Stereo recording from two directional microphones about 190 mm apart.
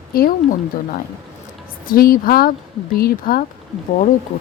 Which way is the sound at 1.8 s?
50° left (ahead or behind).